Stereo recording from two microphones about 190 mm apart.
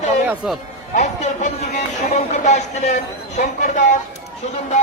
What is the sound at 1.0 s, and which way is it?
Speech, 40° left (ahead or behind).